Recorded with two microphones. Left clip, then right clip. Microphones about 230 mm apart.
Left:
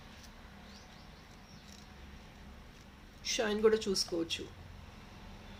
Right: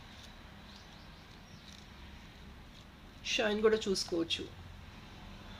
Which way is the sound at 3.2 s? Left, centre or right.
Centre.